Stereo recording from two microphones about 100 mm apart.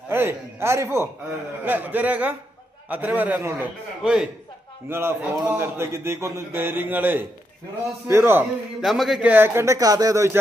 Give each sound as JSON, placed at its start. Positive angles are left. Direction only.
{"t": 0.1, "sound": "a man's voice", "side_deg": -25}
{"t": 4.0, "sound": "a man's voice", "side_deg": -5}
{"t": 4.9, "sound": "a man's voice", "side_deg": -25}
{"t": 5.6, "sound": "speech", "side_deg": -25}
{"t": 8.8, "sound": "a man's voice", "side_deg": 0}
{"t": 9.2, "sound": "speech", "side_deg": -20}
{"t": 9.7, "sound": "speech", "side_deg": -40}